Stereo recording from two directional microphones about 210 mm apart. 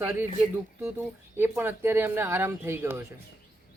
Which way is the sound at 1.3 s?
10° right (ahead or behind).